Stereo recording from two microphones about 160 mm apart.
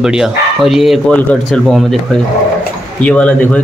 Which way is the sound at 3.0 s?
10° left (ahead or behind).